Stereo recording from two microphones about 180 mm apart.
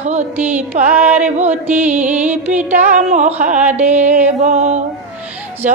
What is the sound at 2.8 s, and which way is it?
Music, 40° right (ahead or behind).